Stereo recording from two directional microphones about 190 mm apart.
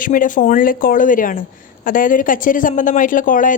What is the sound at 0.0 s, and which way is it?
A woman's voice, 45° left (ahead or behind).